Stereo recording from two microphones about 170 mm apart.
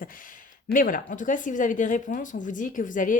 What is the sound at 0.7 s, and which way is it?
Speech, 55° left (ahead or behind).